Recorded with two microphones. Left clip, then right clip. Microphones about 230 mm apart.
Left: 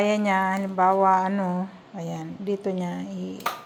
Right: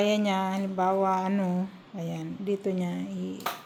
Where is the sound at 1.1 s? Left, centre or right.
Centre.